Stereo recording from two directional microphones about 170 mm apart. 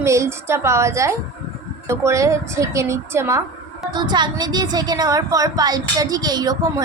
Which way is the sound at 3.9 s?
25° right (ahead or behind).